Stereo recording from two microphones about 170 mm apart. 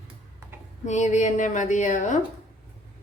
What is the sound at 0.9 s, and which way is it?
A woman's voice, 45° left (ahead or behind).